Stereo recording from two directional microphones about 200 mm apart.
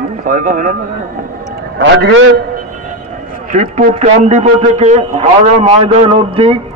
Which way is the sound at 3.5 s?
35° right (ahead or behind).